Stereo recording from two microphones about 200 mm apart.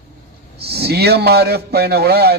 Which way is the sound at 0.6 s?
55° right (ahead or behind).